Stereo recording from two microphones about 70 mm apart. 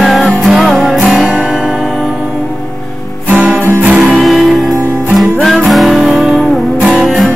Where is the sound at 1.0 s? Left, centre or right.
Centre.